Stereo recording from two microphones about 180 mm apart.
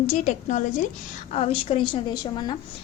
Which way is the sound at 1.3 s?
35° left (ahead or behind).